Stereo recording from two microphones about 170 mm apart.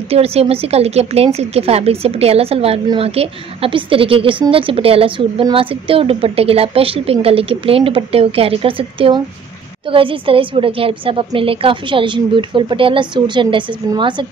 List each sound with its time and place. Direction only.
0.1 s a woman's voice: 35° right (ahead or behind)